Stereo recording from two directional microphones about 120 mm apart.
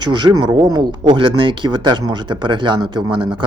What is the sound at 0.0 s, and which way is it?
Speech, 40° right (ahead or behind).